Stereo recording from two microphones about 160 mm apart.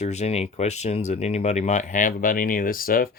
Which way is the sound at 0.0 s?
45° left (ahead or behind).